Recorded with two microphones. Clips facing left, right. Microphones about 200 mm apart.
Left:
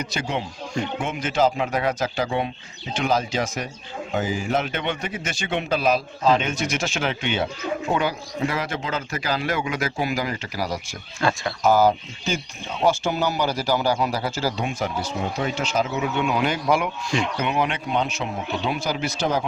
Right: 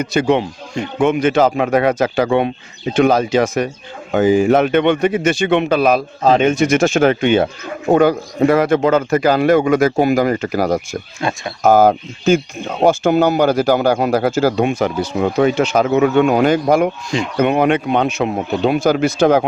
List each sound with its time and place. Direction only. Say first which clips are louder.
0.0 s speech: right 12 dB; 55° right (ahead or behind)
11.2 s speech: right 1 dB; 20° right (ahead or behind)
11.6 s speech: right 7 dB; 55° right (ahead or behind)